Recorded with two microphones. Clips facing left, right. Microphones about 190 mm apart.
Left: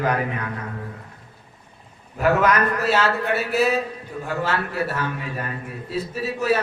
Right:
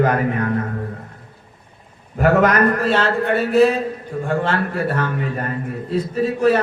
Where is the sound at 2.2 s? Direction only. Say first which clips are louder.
Right 4 dB; 50° right (ahead or behind).